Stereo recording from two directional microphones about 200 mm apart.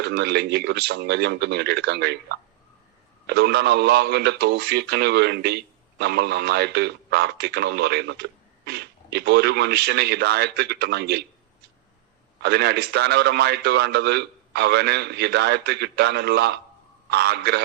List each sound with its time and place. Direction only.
0.0 s speech: 55° right (ahead or behind)
12.4 s speech: 55° right (ahead or behind)